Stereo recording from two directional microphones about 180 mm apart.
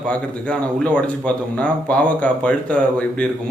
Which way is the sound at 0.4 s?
5° left (ahead or behind).